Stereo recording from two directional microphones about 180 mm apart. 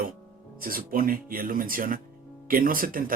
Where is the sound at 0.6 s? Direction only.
50° right (ahead or behind).